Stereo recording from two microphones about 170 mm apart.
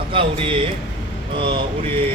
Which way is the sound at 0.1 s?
30° right (ahead or behind).